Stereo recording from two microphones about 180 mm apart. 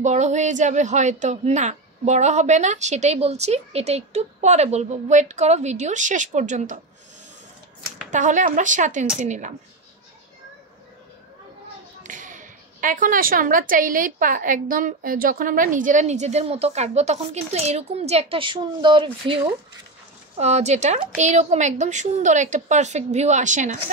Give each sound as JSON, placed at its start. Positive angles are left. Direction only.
{"t": 0.0, "sound": "speech", "side_deg": -40}
{"t": 8.1, "sound": "speech", "side_deg": -45}
{"t": 12.0, "sound": "speech", "side_deg": -45}
{"t": 20.3, "sound": "speech", "side_deg": -40}